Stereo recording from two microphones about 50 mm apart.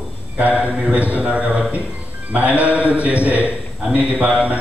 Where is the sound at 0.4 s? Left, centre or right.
Right.